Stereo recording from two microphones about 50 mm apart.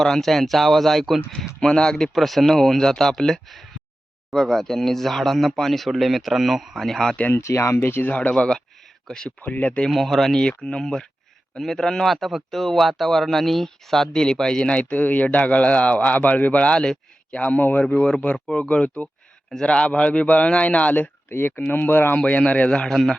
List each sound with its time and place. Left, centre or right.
0.0 s speech: centre
6.8 s speech: centre
7.3 s speech: left
7.8 s speech: left
8.0 s a man's voice: left
9.0 s speech: centre
9.4 s speech: left
9.9 s speech: centre
10.3 s a man's voice: centre
17.8 s a man's voice: centre
21.2 s speech: left
22.2 s a man's voice: left
22.9 s speech: centre